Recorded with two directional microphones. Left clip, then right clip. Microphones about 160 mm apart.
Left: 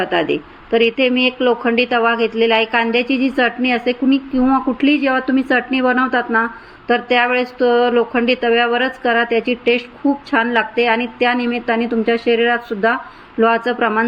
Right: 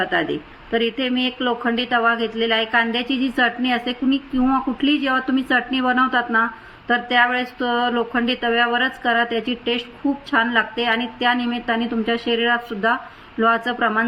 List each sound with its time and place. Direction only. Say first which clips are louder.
0.0 s speech: left 4 dB; 5° left (ahead or behind)